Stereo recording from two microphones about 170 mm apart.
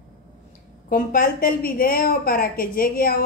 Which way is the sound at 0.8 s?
55° left (ahead or behind).